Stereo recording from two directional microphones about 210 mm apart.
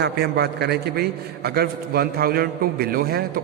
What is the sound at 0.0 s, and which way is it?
A man's voice, 50° right (ahead or behind).